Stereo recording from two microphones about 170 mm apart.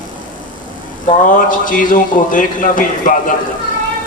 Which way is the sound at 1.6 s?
50° left (ahead or behind).